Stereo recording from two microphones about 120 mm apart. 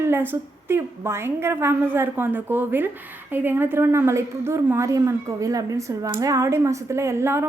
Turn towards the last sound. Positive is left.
turn(degrees=-20)  # may be behind; listen again after turning